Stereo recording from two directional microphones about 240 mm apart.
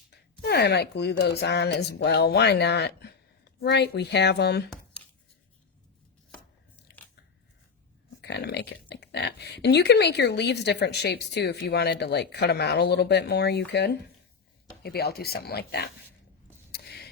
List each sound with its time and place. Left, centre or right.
0.1 s speech: left
8.2 s speech: left
16.7 s a sound: left